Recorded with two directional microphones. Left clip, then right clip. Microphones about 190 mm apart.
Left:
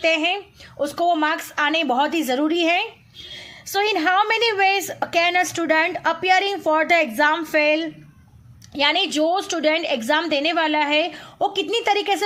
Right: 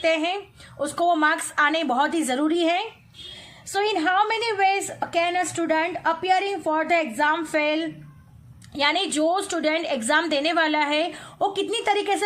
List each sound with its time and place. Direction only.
0.0 s a woman's voice: 15° left (ahead or behind)